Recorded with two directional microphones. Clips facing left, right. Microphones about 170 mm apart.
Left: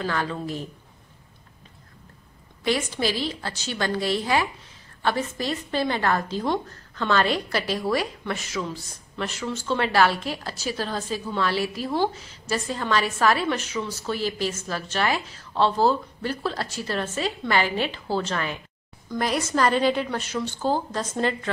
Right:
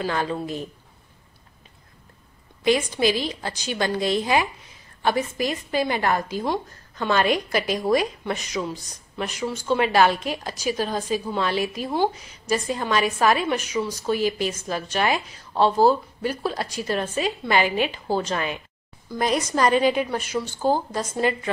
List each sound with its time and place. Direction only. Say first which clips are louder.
0.0 s speech: right 2 dB; 20° right (ahead or behind)
2.6 s a woman's voice: right 4 dB; 15° right (ahead or behind)